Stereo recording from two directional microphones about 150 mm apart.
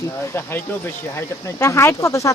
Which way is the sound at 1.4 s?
20° left (ahead or behind).